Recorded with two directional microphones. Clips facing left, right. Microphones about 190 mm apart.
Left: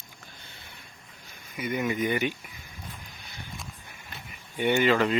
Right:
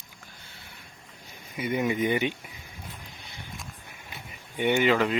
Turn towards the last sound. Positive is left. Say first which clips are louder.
# even
turn(degrees=-10)  # may be behind; listen again after turning